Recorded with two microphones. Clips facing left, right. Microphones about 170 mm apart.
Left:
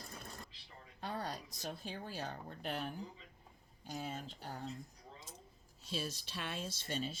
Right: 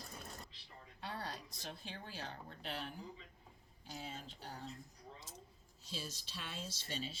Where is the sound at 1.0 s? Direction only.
45° left (ahead or behind).